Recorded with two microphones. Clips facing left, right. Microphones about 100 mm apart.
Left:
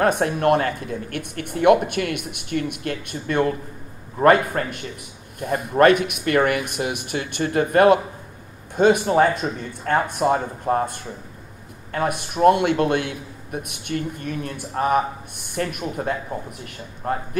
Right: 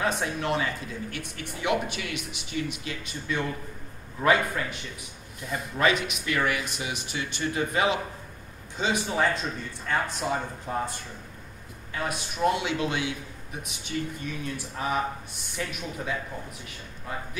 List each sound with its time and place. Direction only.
0.0 s a man's voice: 55° left (ahead or behind)